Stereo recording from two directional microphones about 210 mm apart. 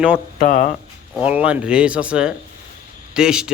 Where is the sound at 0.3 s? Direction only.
40° left (ahead or behind).